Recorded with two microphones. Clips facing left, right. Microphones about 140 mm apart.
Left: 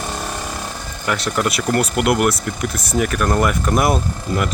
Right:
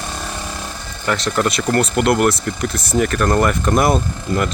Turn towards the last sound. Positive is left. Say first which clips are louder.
# right 1 dB
turn(degrees=5)  # may be behind; listen again after turning